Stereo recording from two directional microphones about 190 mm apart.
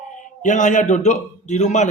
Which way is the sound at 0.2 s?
40° left (ahead or behind).